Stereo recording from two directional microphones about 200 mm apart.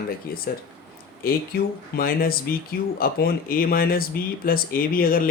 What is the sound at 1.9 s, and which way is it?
Speech, 45° left (ahead or behind).